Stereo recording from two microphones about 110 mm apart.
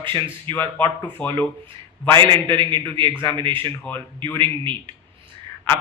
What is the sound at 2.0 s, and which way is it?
Speech, 50° right (ahead or behind).